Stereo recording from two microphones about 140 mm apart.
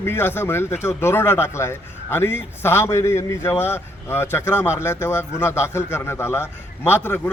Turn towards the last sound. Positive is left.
turn(degrees=15)  # may be behind; listen again after turning